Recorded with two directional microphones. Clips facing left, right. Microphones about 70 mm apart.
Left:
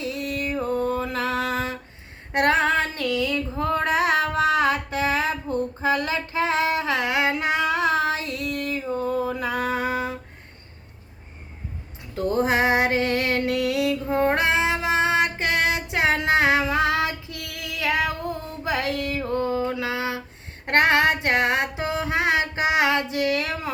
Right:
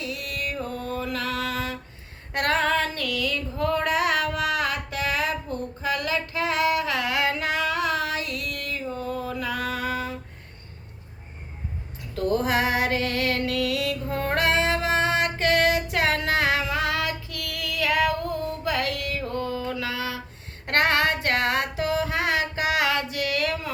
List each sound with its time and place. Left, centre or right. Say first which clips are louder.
0.0 s music: left 4 dB; left
2.3 s female singing: left 3 dB; left
12.1 s music: left 2 dB; left
20.7 s a sound: left 3 dB; left